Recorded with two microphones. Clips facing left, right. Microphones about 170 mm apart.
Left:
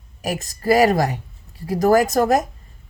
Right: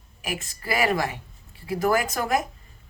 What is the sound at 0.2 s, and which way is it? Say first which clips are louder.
A woman's voice: left 7 dB; 40° left (ahead or behind).